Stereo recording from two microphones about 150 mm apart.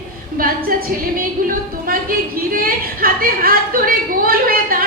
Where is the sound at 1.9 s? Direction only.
75° right (ahead or behind).